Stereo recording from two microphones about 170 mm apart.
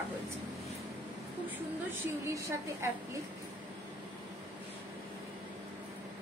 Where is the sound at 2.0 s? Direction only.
15° right (ahead or behind).